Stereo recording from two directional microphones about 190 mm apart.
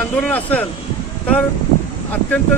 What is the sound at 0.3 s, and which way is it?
Speech, 10° left (ahead or behind).